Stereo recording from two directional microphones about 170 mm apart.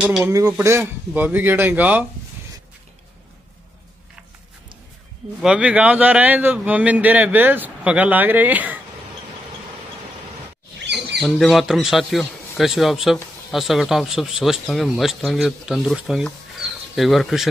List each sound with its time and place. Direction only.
0.2 s a man's voice: 20° right (ahead or behind)
5.4 s a man's voice: 5° right (ahead or behind)
11.1 s a man's voice: centre (ahead or behind)